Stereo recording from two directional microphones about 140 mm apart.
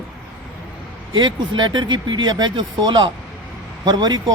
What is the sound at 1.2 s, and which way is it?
Speech, 30° right (ahead or behind).